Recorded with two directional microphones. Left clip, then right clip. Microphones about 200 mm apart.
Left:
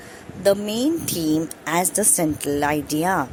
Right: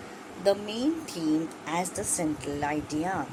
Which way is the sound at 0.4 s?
45° left (ahead or behind).